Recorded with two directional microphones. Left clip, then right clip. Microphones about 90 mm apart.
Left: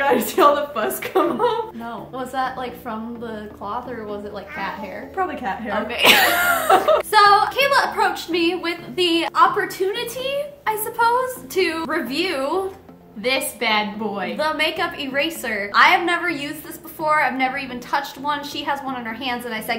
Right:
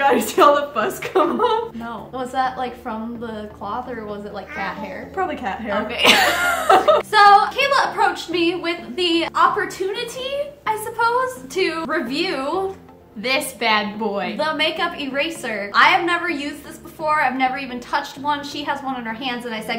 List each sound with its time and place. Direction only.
0.0 s a woman's voice: 25° right (ahead or behind)
1.9 s a woman's voice: 35° left (ahead or behind)
5.1 s a woman's voice: 35° right (ahead or behind)
5.7 s a woman's voice: 45° left (ahead or behind)
13.2 s a woman's voice: 30° right (ahead or behind)
14.4 s a woman's voice: 45° left (ahead or behind)